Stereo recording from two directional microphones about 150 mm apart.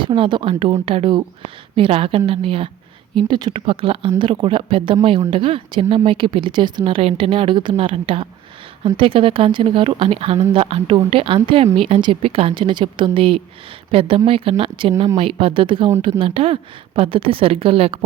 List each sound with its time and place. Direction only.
0.0 s speech: 35° right (ahead or behind)